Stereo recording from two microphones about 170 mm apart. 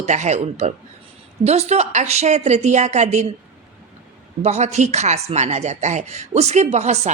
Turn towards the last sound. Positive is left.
turn(degrees=-40)  # may be behind; listen again after turning